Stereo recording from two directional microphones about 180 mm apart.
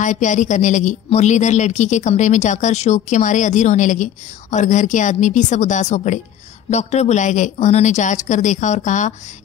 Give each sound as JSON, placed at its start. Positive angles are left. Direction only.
{"t": 0.0, "sound": "a woman's voice", "side_deg": 45}